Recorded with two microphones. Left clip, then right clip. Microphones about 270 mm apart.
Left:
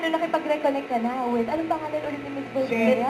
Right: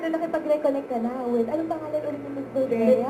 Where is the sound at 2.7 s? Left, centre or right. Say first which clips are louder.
Right 2 dB; centre.